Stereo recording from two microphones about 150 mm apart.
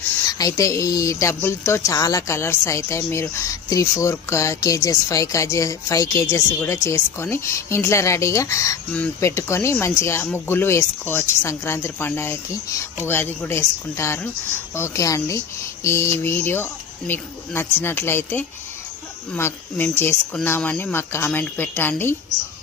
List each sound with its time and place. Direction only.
0.3 s speech: 25° left (ahead or behind)